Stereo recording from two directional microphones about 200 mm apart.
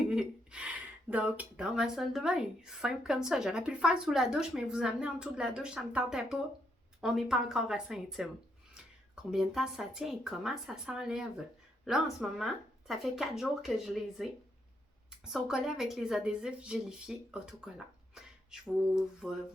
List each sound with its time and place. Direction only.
0.1 s speech: 5° right (ahead or behind)
9.3 s speech: centre (ahead or behind)